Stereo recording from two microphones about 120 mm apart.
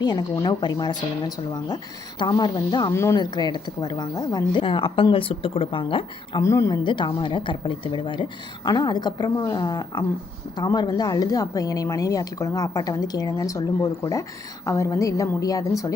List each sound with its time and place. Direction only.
0.0 s a woman's voice: 35° left (ahead or behind)
2.9 s a woman's voice: 25° left (ahead or behind)
3.2 s a woman's voice: 40° left (ahead or behind)
6.4 s a woman's voice: 25° left (ahead or behind)
6.8 s a woman's voice: 40° left (ahead or behind)